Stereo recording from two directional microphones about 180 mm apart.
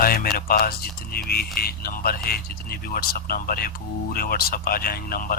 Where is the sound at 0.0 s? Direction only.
55° left (ahead or behind).